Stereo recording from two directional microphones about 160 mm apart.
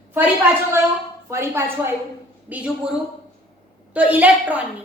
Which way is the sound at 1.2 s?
15° right (ahead or behind).